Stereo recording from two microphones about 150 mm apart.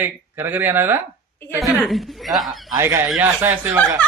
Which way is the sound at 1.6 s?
Centre (ahead or behind).